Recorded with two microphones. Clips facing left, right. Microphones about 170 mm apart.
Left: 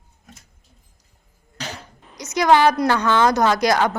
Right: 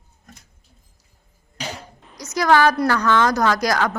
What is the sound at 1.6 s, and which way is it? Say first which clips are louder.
Music: right 2 dB; 10° right (ahead or behind).